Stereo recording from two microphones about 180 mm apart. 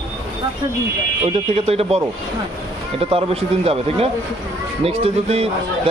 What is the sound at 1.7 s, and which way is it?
Speech, 35° right (ahead or behind).